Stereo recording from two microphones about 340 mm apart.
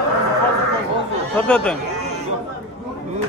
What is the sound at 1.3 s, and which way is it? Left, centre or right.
Speech, centre.